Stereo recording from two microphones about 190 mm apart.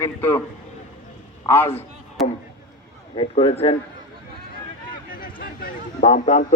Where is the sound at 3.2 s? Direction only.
30° left (ahead or behind).